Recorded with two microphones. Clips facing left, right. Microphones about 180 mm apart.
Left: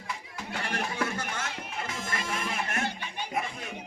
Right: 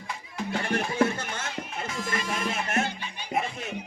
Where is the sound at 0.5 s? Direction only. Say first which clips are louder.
Right 5 dB; 25° right (ahead or behind).